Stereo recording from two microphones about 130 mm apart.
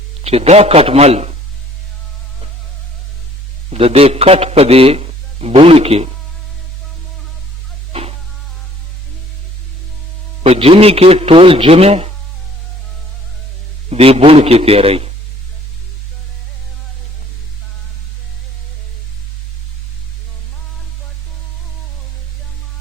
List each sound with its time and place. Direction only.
0.2 s a man's voice: 50° right (ahead or behind)
3.7 s a man's voice: 50° right (ahead or behind)
10.4 s a man's voice: 50° right (ahead or behind)
13.9 s a man's voice: 50° right (ahead or behind)